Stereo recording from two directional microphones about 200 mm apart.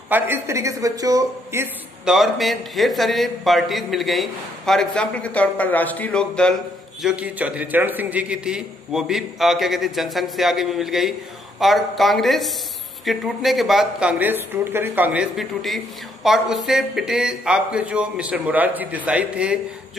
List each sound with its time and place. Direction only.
0.1 s a man's voice: 10° right (ahead or behind)
2.1 s a man's voice: centre (ahead or behind)